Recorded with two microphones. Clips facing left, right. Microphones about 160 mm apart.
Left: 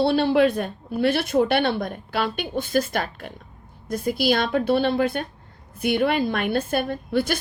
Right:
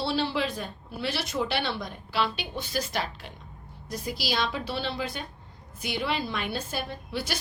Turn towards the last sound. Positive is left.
turn(degrees=55)  # may be behind; listen again after turning